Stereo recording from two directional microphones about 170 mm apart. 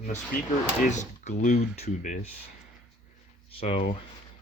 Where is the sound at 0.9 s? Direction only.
45° left (ahead or behind).